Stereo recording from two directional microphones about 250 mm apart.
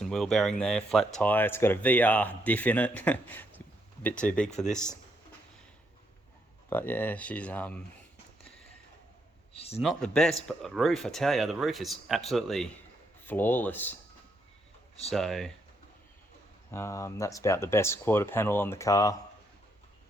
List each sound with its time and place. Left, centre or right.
0.0 s speech: centre
6.7 s speech: centre
9.5 s speech: left
9.8 s speech: centre
15.1 s speech: centre
16.7 s speech: centre